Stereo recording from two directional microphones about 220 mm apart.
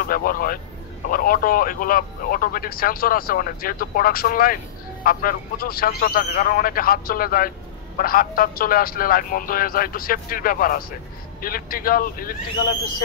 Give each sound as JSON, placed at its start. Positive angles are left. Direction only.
{"t": 0.0, "sound": "speech", "side_deg": 40}